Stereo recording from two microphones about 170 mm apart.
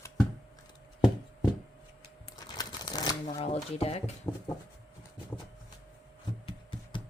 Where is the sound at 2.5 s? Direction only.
25° left (ahead or behind).